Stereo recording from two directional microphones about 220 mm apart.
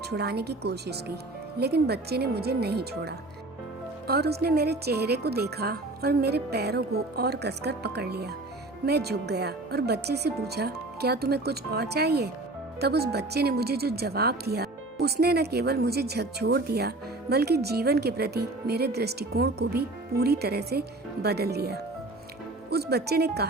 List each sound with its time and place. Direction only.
0.1 s speech: 45° right (ahead or behind)